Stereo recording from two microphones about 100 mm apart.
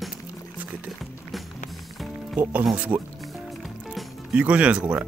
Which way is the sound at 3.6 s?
Centre (ahead or behind).